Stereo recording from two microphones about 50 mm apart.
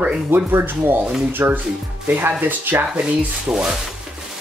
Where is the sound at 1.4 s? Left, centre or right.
Right.